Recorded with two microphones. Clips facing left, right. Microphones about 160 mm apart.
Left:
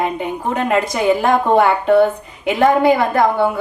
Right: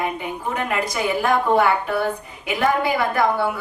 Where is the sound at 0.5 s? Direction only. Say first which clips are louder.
Left 7 dB; 25° left (ahead or behind).